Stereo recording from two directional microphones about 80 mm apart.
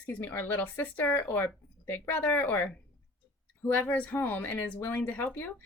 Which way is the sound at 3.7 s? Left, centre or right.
Left.